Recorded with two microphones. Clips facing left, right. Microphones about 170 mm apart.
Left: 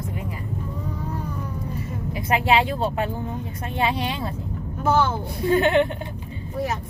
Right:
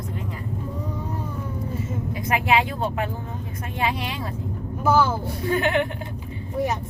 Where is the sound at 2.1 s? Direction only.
25° left (ahead or behind).